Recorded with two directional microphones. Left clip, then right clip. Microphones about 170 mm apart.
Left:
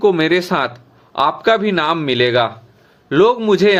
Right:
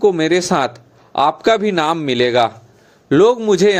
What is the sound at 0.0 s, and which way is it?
A man's voice, 25° right (ahead or behind).